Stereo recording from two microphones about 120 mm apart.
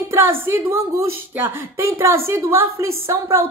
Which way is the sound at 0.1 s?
20° right (ahead or behind).